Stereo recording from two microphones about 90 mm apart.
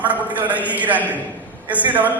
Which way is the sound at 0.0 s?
20° right (ahead or behind).